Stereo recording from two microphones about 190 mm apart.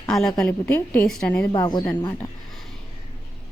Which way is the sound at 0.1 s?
5° left (ahead or behind).